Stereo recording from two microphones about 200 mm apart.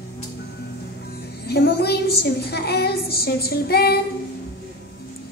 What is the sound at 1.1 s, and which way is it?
A woman's voice, 55° left (ahead or behind).